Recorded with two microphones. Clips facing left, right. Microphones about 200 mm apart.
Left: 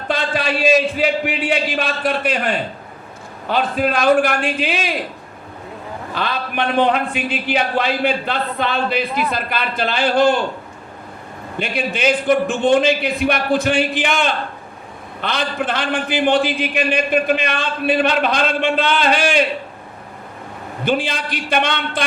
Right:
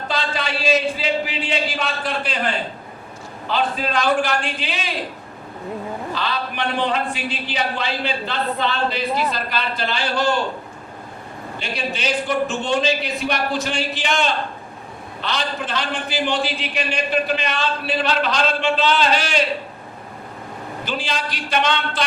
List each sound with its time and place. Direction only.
0.1 s a man's voice: 60° left (ahead or behind)
3.5 s a man's voice: 55° left (ahead or behind)
6.1 s a man's voice: 55° left (ahead or behind)
11.6 s a man's voice: 55° left (ahead or behind)
20.8 s a man's voice: 55° left (ahead or behind)